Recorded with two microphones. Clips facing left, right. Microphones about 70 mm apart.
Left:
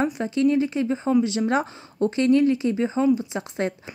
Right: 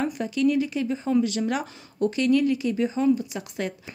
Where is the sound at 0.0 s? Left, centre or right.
Left.